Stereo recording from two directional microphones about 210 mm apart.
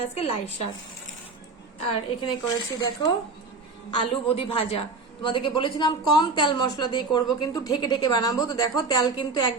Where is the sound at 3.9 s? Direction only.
25° left (ahead or behind).